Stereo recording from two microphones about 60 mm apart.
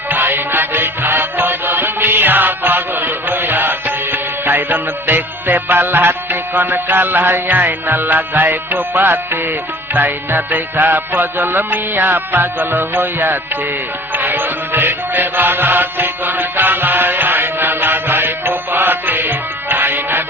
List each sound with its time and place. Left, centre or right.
0.1 s music: right